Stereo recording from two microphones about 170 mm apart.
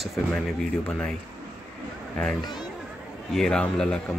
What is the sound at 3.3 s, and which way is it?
Speech, 5° left (ahead or behind).